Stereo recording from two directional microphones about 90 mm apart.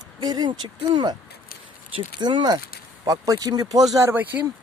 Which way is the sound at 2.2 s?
55° right (ahead or behind).